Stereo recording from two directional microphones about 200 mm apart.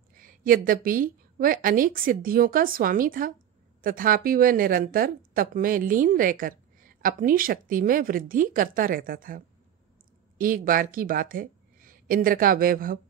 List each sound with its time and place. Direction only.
0.1 s speech: 45° right (ahead or behind)